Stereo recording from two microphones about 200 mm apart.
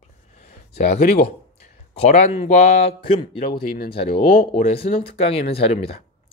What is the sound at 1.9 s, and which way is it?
Speech, 35° left (ahead or behind).